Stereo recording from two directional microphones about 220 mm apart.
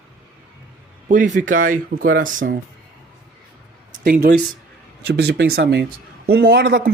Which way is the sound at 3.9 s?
40° right (ahead or behind).